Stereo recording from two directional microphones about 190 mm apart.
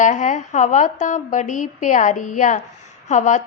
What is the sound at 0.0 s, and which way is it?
A woman's voice, 40° left (ahead or behind).